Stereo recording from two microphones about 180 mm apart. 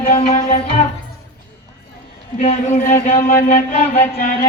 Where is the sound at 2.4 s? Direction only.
40° left (ahead or behind).